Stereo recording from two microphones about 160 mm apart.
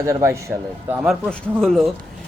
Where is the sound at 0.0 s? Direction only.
15° right (ahead or behind).